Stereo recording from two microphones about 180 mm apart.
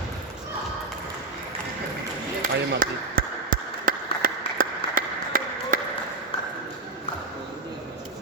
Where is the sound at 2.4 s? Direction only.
50° right (ahead or behind).